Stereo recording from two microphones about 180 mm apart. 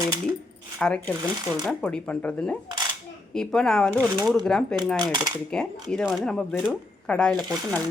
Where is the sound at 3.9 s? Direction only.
15° right (ahead or behind).